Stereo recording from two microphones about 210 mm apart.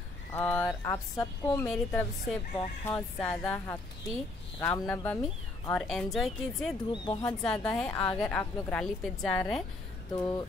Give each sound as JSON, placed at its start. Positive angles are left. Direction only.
{"t": 0.3, "sound": "a woman's voice", "side_deg": 10}
{"t": 6.9, "sound": "speech", "side_deg": 20}
{"t": 7.2, "sound": "a woman's voice", "side_deg": 5}
{"t": 7.9, "sound": "a woman's voice", "side_deg": 15}
{"t": 10.1, "sound": "speech", "side_deg": 20}